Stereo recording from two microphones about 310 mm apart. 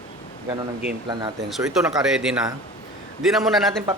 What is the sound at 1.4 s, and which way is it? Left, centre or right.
A man's voice, centre.